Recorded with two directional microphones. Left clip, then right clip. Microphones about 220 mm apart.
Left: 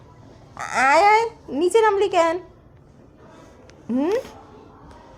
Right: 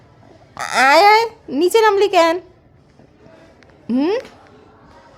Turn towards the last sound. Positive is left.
turn(degrees=-40)  # may be behind; listen again after turning